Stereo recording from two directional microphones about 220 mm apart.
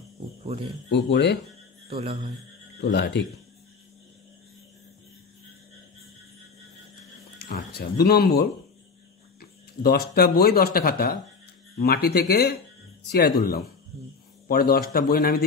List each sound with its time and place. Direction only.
0.8 s speech: 50° left (ahead or behind)
1.9 s a man's voice: 25° right (ahead or behind)
2.8 s speech: 50° left (ahead or behind)
7.3 s speech: 45° left (ahead or behind)